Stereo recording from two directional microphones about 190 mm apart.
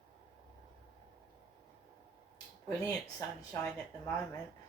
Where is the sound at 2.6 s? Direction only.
20° left (ahead or behind).